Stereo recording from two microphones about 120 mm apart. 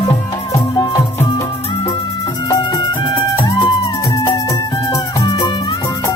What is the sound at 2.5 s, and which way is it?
Music, 35° left (ahead or behind).